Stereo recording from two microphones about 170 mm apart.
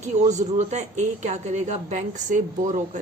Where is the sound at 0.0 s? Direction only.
45° right (ahead or behind).